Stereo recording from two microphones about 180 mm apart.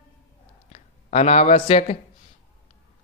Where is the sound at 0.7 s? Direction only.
35° left (ahead or behind).